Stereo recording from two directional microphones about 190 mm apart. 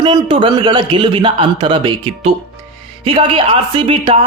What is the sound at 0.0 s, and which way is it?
Speech, 25° right (ahead or behind).